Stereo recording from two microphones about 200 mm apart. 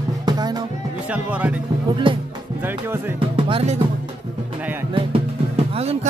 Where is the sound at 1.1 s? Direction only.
5° right (ahead or behind).